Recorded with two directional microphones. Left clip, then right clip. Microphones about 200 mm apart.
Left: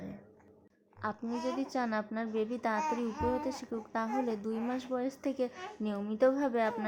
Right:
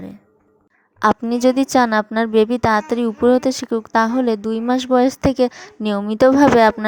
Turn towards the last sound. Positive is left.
turn(degrees=-50)  # may be behind; listen again after turning